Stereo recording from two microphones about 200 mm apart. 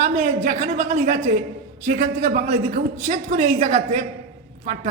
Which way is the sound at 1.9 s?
40° right (ahead or behind).